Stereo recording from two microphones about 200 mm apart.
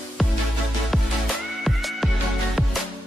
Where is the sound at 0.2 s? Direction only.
Centre (ahead or behind).